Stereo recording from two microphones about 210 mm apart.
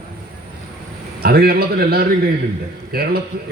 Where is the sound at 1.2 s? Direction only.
45° right (ahead or behind).